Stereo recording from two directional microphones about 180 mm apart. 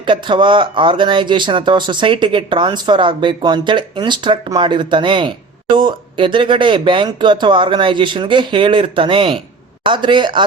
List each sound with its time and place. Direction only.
0.0 s speech: 25° right (ahead or behind)